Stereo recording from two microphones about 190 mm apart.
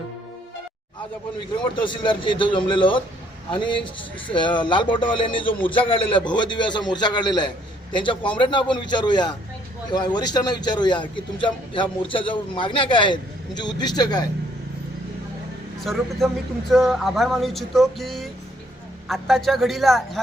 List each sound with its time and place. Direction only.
1.7 s a man's voice: 25° left (ahead or behind)
15.8 s speech: centre (ahead or behind)